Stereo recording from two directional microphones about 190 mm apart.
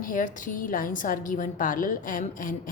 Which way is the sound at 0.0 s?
45° left (ahead or behind).